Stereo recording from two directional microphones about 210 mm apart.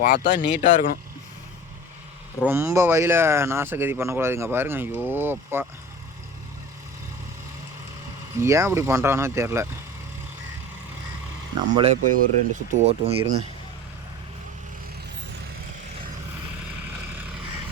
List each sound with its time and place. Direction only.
0.0 s speech: 50° left (ahead or behind)
0.6 s speech: 35° left (ahead or behind)
2.5 s speech: 10° right (ahead or behind)
8.4 s speech: 15° right (ahead or behind)
11.8 s speech: 35° right (ahead or behind)